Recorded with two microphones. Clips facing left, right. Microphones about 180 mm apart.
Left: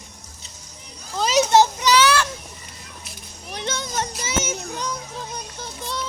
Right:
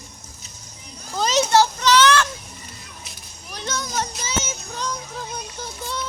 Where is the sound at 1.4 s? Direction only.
20° left (ahead or behind).